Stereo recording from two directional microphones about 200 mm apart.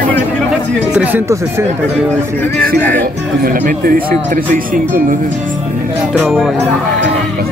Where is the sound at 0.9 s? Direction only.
10° right (ahead or behind).